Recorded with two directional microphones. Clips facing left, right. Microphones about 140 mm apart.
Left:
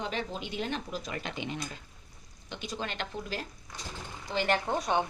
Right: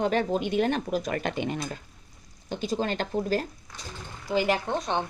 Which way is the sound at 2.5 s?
40° right (ahead or behind).